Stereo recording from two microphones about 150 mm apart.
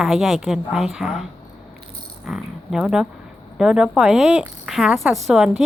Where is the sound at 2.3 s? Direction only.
5° right (ahead or behind).